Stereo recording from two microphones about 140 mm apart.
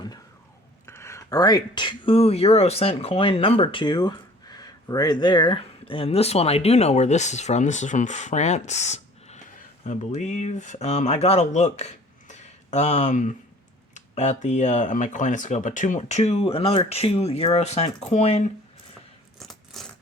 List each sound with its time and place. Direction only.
0.9 s speech: 20° left (ahead or behind); by 18.4 s 50° left (ahead or behind)
19.4 s coin: centre (ahead or behind)